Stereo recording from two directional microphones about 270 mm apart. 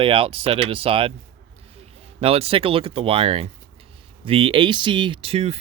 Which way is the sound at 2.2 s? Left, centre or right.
Right.